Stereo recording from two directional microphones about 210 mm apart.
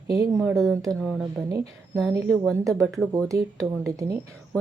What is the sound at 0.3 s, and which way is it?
Speech, centre (ahead or behind).